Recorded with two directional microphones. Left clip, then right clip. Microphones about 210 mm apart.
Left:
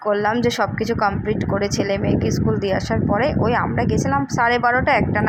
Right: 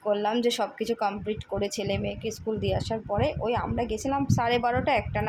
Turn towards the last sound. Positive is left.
turn(degrees=10)  # may be behind; listen again after turning